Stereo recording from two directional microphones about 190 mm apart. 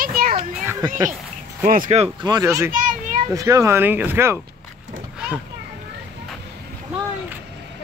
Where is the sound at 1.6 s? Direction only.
45° right (ahead or behind).